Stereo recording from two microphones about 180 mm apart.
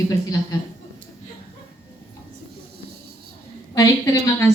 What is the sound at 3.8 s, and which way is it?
Speech, 20° left (ahead or behind).